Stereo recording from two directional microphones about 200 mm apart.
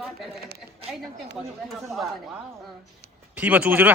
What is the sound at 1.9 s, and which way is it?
Speech, centre (ahead or behind).